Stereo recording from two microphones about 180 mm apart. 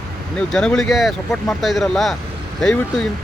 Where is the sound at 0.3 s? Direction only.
5° left (ahead or behind).